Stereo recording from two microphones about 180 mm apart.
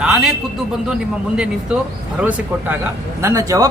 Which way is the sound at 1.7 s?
5° right (ahead or behind).